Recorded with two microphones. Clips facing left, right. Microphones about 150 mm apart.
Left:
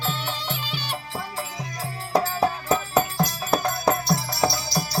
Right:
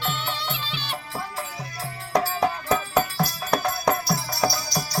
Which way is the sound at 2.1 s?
30° left (ahead or behind).